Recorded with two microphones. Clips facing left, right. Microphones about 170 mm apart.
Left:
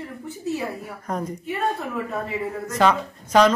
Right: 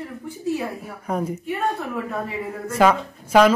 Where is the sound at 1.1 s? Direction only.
10° right (ahead or behind).